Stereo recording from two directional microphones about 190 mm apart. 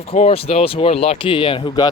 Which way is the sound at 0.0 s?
35° left (ahead or behind).